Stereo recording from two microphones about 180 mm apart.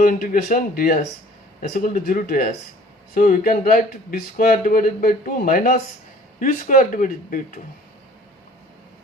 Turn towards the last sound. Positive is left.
turn(degrees=45)  # may be behind; listen again after turning